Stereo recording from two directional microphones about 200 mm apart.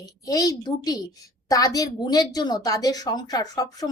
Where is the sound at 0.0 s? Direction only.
20° left (ahead or behind).